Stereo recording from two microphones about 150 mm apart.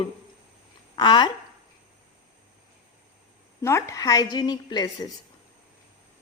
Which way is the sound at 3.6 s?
20° left (ahead or behind).